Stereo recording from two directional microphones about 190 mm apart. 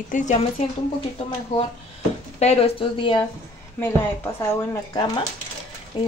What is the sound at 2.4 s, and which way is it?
Speech, 30° left (ahead or behind).